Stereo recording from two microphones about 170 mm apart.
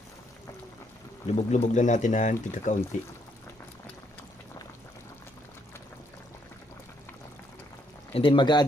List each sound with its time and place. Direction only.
1.4 s speech: 40° left (ahead or behind)
8.1 s speech: 30° left (ahead or behind)